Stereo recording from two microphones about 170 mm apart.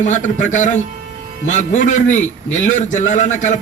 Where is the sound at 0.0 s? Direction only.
45° left (ahead or behind).